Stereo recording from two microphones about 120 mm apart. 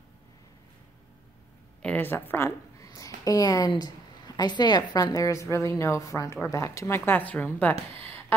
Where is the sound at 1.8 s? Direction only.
15° left (ahead or behind).